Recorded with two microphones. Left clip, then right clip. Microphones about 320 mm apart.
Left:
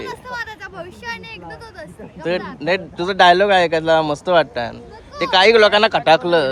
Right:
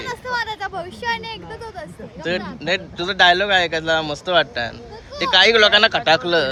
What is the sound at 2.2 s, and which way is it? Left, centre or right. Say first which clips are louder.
Speech: left 2 dB; centre.